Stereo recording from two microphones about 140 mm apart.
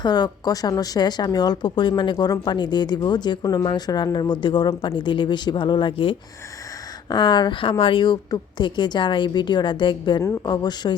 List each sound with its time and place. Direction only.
0.0 s a woman's voice: 30° left (ahead or behind)